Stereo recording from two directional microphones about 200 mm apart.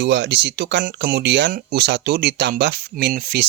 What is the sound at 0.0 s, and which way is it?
Speech, 60° right (ahead or behind).